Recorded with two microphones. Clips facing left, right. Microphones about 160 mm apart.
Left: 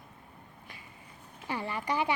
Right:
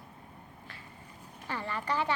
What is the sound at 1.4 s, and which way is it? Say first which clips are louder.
Speech: left 1 dB; 15° left (ahead or behind).